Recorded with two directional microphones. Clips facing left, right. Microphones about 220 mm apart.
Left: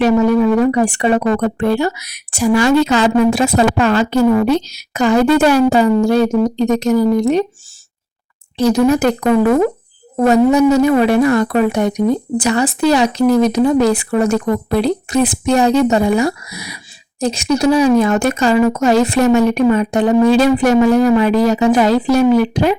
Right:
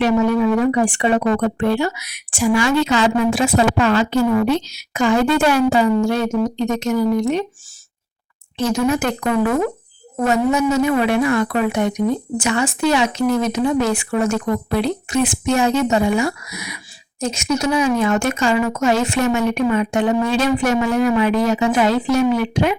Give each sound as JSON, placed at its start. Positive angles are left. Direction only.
{"t": 0.0, "sound": "speech", "side_deg": 40}
{"t": 8.5, "sound": "speech", "side_deg": 35}